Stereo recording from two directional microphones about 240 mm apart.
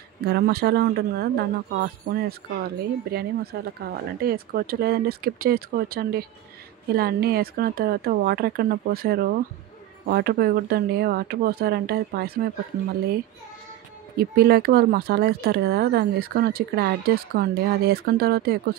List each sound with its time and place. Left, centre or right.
0.2 s speech: right
14.1 s speech: right